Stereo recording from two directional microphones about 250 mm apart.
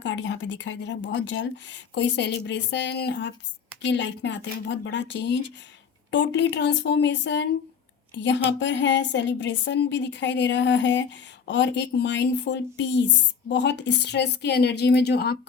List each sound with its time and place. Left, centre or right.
0.0 s speech: left